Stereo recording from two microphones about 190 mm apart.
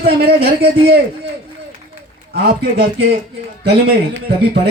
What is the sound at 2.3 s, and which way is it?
Speech, 55° right (ahead or behind).